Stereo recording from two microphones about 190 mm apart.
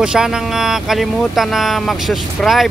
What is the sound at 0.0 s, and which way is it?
Speech, 5° right (ahead or behind).